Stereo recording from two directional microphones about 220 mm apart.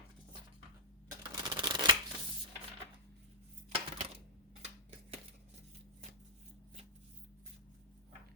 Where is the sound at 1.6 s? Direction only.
20° right (ahead or behind).